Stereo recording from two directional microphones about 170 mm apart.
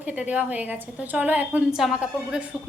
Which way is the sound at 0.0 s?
10° right (ahead or behind).